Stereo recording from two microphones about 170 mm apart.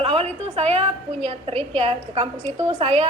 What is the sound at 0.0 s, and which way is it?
A woman's voice, 35° right (ahead or behind).